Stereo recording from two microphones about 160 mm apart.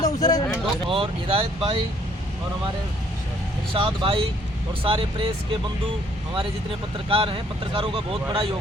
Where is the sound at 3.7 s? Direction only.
30° right (ahead or behind).